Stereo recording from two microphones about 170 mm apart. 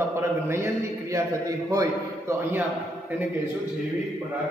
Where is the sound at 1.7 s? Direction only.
20° right (ahead or behind).